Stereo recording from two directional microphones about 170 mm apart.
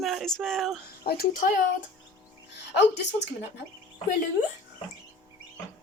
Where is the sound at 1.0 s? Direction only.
65° left (ahead or behind).